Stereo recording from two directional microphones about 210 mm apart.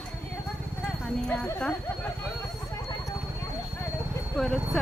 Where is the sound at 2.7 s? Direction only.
15° left (ahead or behind).